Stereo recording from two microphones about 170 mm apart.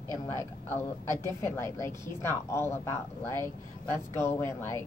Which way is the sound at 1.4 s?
15° left (ahead or behind).